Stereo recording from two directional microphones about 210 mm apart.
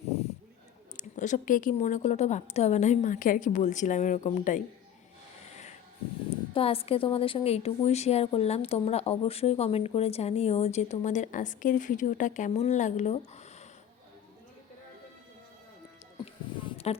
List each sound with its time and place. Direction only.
0.9 s a woman's voice: 35° left (ahead or behind)
6.5 s a woman's voice: 25° left (ahead or behind)
16.2 s a sound: 30° left (ahead or behind)